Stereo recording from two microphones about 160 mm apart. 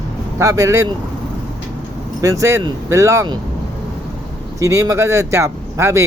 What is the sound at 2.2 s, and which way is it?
Speech, 20° right (ahead or behind).